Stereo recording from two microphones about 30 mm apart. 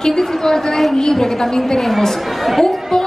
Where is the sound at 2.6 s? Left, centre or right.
Centre.